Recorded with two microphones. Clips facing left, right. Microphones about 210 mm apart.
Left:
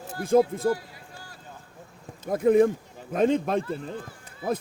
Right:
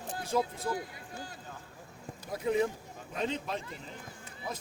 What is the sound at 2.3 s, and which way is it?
Speech, 50° left (ahead or behind).